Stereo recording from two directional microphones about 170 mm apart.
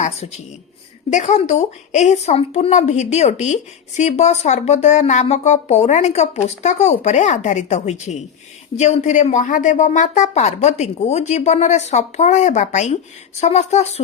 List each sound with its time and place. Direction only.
1.1 s speech: 40° left (ahead or behind)